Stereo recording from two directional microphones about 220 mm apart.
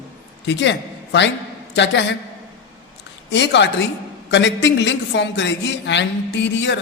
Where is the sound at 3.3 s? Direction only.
55° left (ahead or behind).